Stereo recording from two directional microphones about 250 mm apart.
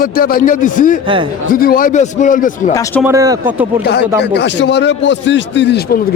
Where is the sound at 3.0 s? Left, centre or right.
Centre.